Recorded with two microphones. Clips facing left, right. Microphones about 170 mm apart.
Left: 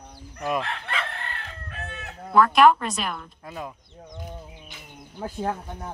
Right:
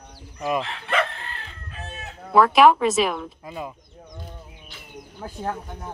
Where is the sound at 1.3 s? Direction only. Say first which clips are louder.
Left 1 dB; 60° left (ahead or behind).